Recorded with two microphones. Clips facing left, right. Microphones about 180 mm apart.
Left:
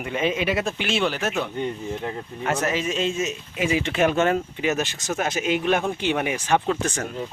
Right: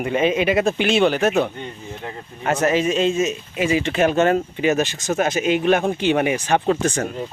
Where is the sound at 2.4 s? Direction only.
50° right (ahead or behind).